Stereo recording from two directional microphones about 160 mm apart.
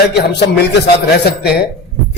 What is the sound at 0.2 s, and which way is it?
Speech, 90° left.